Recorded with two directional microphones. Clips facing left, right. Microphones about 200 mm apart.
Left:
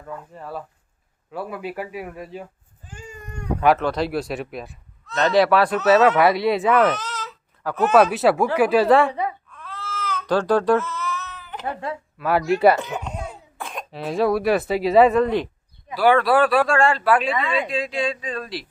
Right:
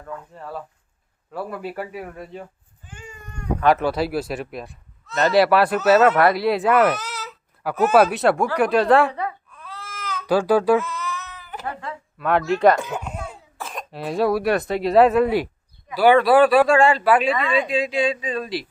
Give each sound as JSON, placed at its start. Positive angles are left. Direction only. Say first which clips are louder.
{"t": 0.0, "sound": "speech", "louder": "even", "side_deg": 5}
{"t": 3.8, "sound": "speech", "louder": "right 1 dB", "side_deg": -5}
{"t": 9.5, "sound": "baby cry", "louder": "left 4 dB", "side_deg": -10}
{"t": 11.6, "sound": "speech", "louder": "left 4 dB", "side_deg": 30}
{"t": 12.1, "sound": "speech", "louder": "even", "side_deg": 0}
{"t": 12.8, "sound": "speech", "louder": "even", "side_deg": -10}
{"t": 13.2, "sound": "speech", "louder": "left 1 dB", "side_deg": 0}